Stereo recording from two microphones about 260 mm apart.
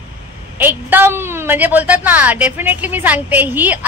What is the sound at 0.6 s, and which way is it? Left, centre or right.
A woman's voice, centre.